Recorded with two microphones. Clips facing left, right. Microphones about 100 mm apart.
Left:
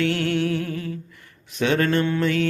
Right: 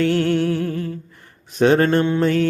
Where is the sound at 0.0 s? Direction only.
35° right (ahead or behind).